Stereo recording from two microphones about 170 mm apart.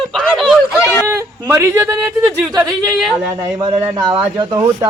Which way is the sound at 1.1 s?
15° right (ahead or behind).